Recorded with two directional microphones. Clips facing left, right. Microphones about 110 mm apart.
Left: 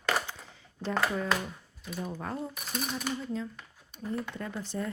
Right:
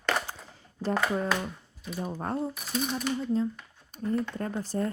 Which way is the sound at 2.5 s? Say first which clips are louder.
Right 4 dB; centre (ahead or behind).